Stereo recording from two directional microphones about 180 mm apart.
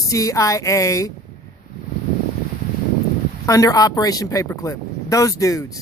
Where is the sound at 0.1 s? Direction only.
20° left (ahead or behind).